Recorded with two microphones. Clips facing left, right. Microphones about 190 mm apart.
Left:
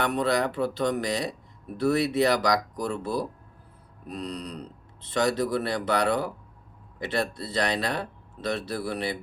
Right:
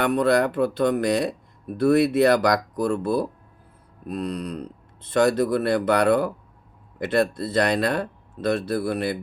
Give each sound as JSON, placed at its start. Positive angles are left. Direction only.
{"t": 0.0, "sound": "speech", "side_deg": -50}